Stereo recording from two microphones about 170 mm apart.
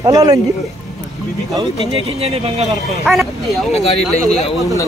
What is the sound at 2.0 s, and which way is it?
Speech, 35° right (ahead or behind).